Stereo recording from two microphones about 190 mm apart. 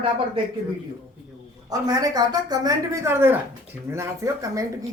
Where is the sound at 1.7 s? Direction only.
20° right (ahead or behind).